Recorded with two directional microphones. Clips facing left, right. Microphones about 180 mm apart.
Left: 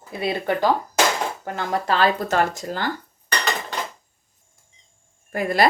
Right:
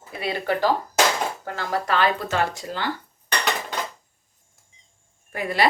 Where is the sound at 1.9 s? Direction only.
40° left (ahead or behind).